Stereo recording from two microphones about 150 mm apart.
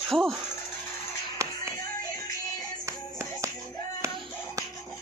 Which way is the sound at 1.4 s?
20° right (ahead or behind).